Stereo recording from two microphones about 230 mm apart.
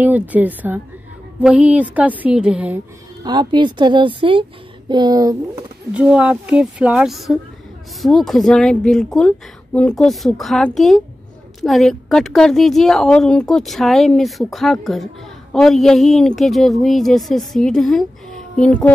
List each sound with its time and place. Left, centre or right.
0.0 s a woman's voice: centre
3.3 s a woman's voice: centre
5.9 s speech: centre